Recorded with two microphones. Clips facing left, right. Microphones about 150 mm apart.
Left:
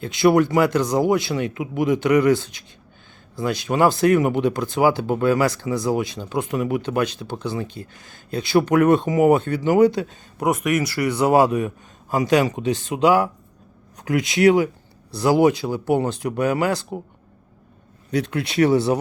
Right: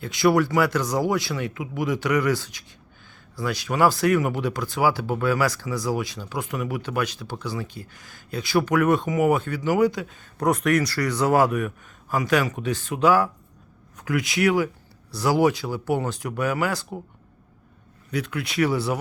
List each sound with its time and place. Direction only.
0.0 s speech: 20° left (ahead or behind)
10.3 s speech: 5° left (ahead or behind)
10.7 s speech: 20° left (ahead or behind)
18.1 s speech: 25° left (ahead or behind)